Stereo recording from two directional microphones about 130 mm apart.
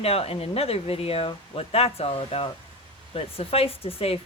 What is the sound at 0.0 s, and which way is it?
Speech, 50° left (ahead or behind).